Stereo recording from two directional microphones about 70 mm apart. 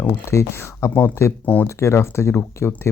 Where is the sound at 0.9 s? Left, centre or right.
Left.